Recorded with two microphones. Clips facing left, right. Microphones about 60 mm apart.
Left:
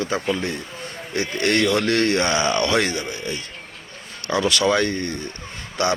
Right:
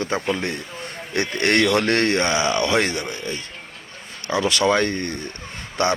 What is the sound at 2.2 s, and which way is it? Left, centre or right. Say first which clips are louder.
Speech: even; centre.